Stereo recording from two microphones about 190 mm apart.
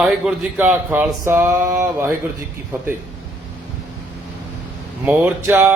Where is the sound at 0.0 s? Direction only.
Centre (ahead or behind).